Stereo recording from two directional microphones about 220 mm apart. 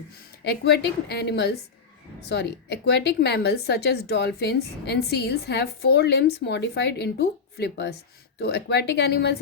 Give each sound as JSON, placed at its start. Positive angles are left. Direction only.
{"t": 0.4, "sound": "speech", "side_deg": 45}